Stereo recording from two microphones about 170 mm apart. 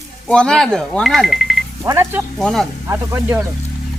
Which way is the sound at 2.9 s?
15° right (ahead or behind).